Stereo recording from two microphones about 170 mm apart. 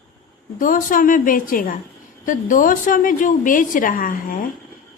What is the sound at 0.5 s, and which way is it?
A woman's voice, 55° left (ahead or behind).